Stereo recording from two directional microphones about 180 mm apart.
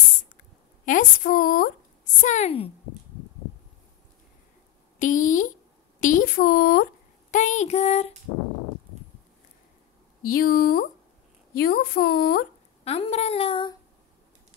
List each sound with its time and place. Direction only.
0.8 s a woman's voice: 50° left (ahead or behind)
2.2 s speech: 40° left (ahead or behind)
4.9 s a woman's voice: 45° left (ahead or behind)
10.2 s a woman's voice: 55° left (ahead or behind)
12.8 s speech: 35° left (ahead or behind)